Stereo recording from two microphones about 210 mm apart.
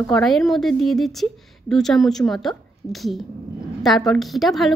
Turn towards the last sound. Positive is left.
turn(degrees=0)  # may be behind; listen again after turning